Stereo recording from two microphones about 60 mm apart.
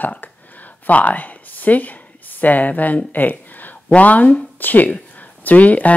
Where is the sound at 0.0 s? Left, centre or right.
Left.